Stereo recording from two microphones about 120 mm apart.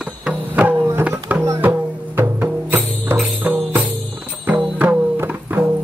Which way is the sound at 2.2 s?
20° right (ahead or behind).